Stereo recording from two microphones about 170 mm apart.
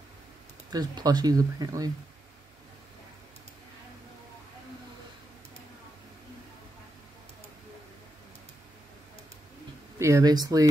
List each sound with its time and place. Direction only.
0.7 s speech: 25° right (ahead or behind)
9.9 s speech: 15° right (ahead or behind)